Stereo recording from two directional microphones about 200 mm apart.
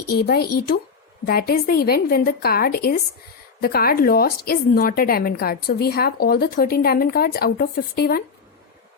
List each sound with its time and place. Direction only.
0.1 s a woman's voice: 50° left (ahead or behind)